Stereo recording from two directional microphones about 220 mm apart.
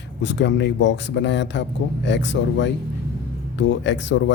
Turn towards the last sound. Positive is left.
turn(degrees=55)  # may be behind; listen again after turning